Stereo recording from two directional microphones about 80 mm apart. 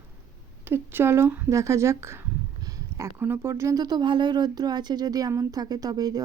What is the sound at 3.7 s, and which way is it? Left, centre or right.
Speech, right.